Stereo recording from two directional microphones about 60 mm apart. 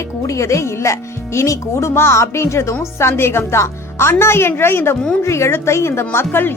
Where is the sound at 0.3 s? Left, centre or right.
Left.